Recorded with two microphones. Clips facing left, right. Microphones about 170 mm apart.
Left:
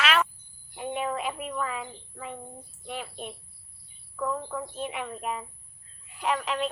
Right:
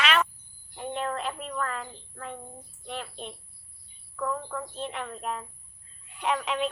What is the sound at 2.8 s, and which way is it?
Speech, 10° left (ahead or behind).